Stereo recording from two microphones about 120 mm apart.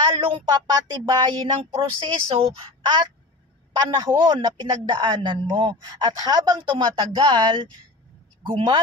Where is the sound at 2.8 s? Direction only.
40° right (ahead or behind).